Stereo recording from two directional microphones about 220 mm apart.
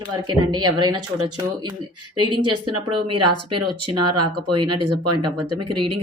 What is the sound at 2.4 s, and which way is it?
Speech, 90° right.